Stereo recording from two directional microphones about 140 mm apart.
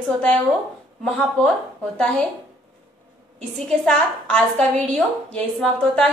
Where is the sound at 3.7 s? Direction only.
5° left (ahead or behind).